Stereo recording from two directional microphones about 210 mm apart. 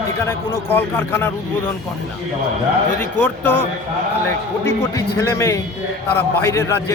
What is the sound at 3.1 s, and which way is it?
A man's voice, 10° left (ahead or behind).